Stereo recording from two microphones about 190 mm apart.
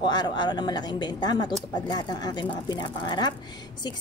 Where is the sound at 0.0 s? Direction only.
25° left (ahead or behind).